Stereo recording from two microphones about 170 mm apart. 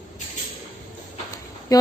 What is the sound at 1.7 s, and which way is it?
Speech, 20° left (ahead or behind).